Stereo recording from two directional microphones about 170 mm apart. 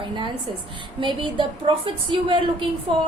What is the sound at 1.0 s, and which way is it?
A woman's voice, 30° right (ahead or behind).